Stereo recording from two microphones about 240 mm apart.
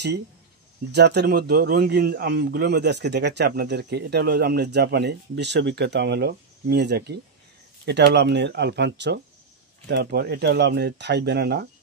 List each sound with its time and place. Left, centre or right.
0.9 s a man's voice: right